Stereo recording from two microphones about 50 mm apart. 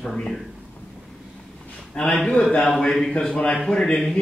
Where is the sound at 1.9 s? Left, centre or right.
Left.